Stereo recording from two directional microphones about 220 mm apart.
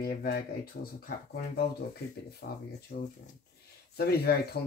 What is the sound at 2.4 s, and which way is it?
Speech, 45° left (ahead or behind).